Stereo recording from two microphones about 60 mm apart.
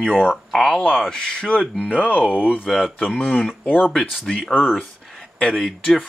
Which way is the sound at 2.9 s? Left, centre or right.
Left.